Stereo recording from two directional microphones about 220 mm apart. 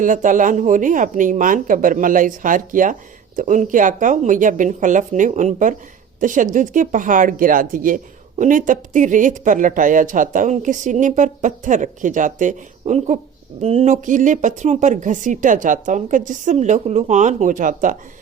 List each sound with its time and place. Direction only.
0.0 s speech: 35° right (ahead or behind)